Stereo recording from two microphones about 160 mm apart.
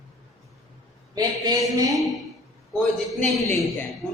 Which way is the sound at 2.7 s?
Centre (ahead or behind).